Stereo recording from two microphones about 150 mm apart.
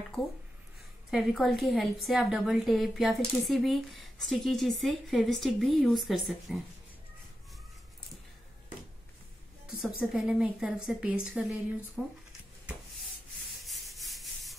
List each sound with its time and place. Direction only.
0.2 s a woman's voice: centre (ahead or behind)
9.8 s a woman's voice: 5° right (ahead or behind)
11.9 s a sound: 5° right (ahead or behind)
13.7 s rub: centre (ahead or behind)